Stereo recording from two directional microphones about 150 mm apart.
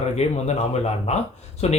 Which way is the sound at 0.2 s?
45° left (ahead or behind).